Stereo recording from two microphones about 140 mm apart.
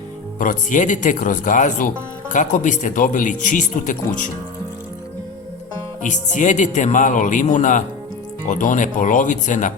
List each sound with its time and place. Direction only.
0.3 s speech: 65° left (ahead or behind)
6.0 s speech: 65° left (ahead or behind)